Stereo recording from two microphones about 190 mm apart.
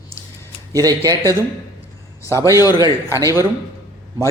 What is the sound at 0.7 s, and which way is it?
Speech, 20° right (ahead or behind).